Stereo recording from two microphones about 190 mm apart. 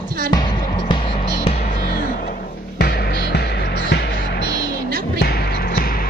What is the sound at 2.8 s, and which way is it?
Music, 60° left (ahead or behind).